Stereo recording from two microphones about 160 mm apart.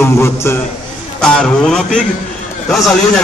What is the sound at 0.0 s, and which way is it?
Speech, 15° left (ahead or behind).